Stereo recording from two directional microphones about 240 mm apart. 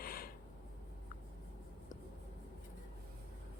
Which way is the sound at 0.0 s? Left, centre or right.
Left.